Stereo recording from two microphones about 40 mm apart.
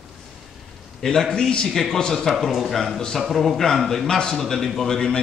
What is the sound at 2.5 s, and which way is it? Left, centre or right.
Speech, centre.